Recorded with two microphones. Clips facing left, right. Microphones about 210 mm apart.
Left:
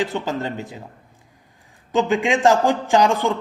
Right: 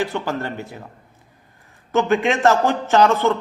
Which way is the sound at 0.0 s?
20° left (ahead or behind).